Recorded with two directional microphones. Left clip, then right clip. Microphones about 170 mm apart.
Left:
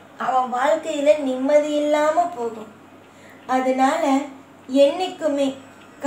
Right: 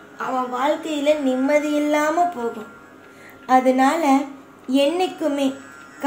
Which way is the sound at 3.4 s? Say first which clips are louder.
Right 3 dB; 45° right (ahead or behind).